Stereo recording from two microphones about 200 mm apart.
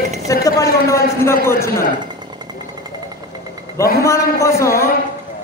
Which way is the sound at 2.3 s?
20° right (ahead or behind).